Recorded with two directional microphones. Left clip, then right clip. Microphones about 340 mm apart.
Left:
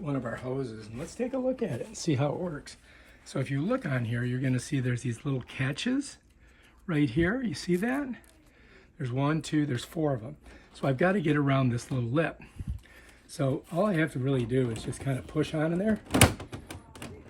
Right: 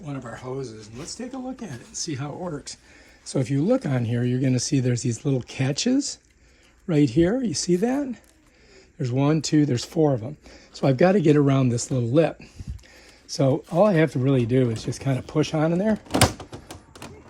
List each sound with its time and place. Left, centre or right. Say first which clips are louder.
0.0 s speech: left 1 dB; centre
2.7 s speech: right 8 dB; centre
14.7 s speech: right 6 dB; centre
14.9 s speech: right 6 dB; centre
16.0 s typewriter: right 3 dB; centre